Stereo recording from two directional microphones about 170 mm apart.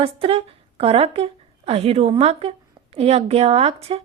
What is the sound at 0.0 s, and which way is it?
A woman's voice, 35° right (ahead or behind).